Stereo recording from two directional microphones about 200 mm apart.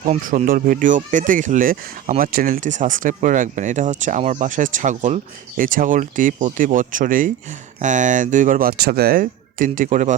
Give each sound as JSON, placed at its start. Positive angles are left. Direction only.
{"t": 0.0, "sound": "speech", "side_deg": -40}